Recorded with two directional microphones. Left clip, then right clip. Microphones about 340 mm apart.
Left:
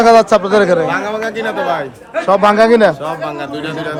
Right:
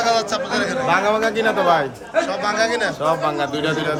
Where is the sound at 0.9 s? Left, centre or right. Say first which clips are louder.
Even; centre.